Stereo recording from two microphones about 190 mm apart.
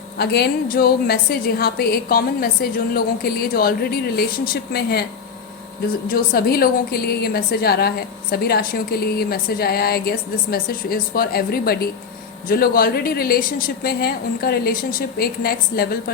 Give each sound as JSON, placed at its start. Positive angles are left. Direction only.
{"t": 0.2, "sound": "a woman's voice", "side_deg": 55}
{"t": 6.1, "sound": "a woman's voice", "side_deg": 50}